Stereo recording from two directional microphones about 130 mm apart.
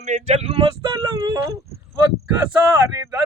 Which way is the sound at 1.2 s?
25° right (ahead or behind).